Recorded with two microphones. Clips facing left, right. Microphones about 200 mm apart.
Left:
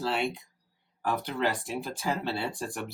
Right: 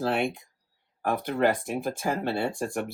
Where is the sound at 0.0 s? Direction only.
50° right (ahead or behind).